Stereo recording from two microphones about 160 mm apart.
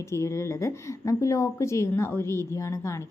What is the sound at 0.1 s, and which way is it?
A woman's voice, 20° left (ahead or behind).